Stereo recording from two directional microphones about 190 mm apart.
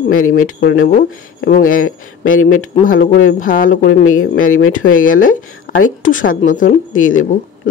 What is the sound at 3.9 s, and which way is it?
A man's voice, 90° left.